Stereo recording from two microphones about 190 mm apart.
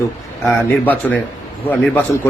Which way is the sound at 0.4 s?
10° left (ahead or behind).